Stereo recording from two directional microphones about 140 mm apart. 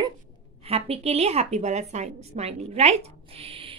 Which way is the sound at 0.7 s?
45° right (ahead or behind).